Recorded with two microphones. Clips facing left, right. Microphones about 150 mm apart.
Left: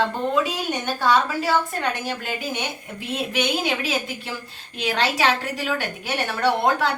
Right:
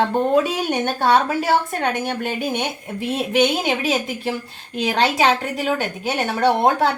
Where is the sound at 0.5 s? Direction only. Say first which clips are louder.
Right 5 dB; 55° right (ahead or behind).